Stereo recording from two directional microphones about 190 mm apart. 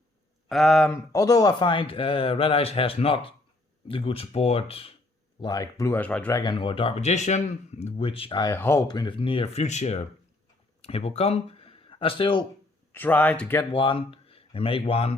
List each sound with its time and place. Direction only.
0.4 s speech: centre (ahead or behind)
1.1 s speech: 20° left (ahead or behind)
5.4 s speech: 20° left (ahead or behind)
6.4 s speech: 25° left (ahead or behind)
8.5 s speech: 15° left (ahead or behind)
12.9 s speech: 10° left (ahead or behind)
13.7 s speech: 25° left (ahead or behind)